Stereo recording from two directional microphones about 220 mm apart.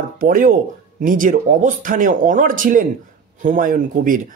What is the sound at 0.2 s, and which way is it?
Speech, 40° right (ahead or behind).